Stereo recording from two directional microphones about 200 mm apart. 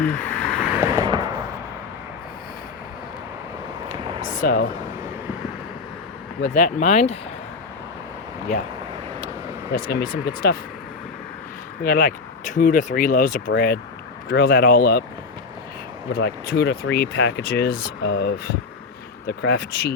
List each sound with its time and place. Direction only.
0.0 s vehicle: 10° left (ahead or behind)
0.8 s a sound: 20° right (ahead or behind)
3.8 s a sound: 40° left (ahead or behind)
6.5 s speech: 40° left (ahead or behind)
9.7 s speech: 45° left (ahead or behind)
11.8 s speech: 50° left (ahead or behind)
16.1 s speech: 55° left (ahead or behind)